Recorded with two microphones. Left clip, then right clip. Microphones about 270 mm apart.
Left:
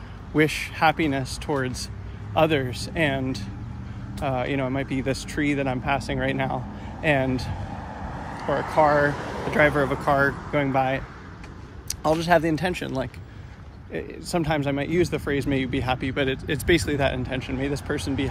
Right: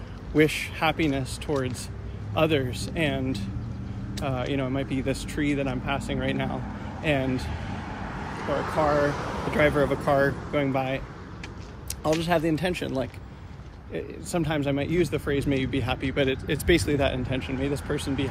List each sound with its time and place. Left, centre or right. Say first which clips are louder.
0.3 s speech: even; centre; by 9.6 s left
9.6 s speech: left 2 dB; centre